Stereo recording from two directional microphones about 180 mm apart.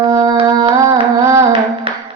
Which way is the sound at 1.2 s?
15° right (ahead or behind).